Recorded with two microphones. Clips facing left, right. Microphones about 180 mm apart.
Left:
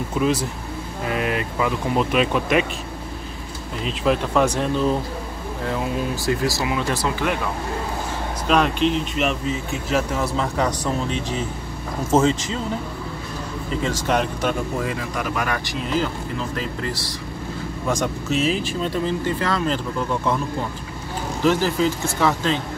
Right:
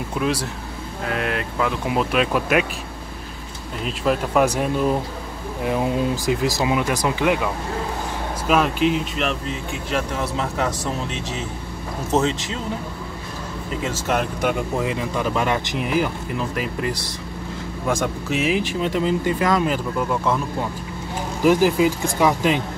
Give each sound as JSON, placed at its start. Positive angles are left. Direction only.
{"t": 0.2, "sound": "speech", "side_deg": -5}
{"t": 3.8, "sound": "speech", "side_deg": -5}
{"t": 8.5, "sound": "speech", "side_deg": -5}
{"t": 12.1, "sound": "speech", "side_deg": 0}
{"t": 13.8, "sound": "speech", "side_deg": -5}
{"t": 21.4, "sound": "speech", "side_deg": -10}